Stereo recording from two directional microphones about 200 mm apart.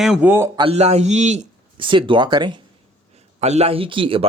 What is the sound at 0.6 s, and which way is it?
Speech, 30° right (ahead or behind).